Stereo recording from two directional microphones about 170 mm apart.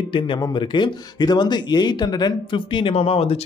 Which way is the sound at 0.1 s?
30° left (ahead or behind).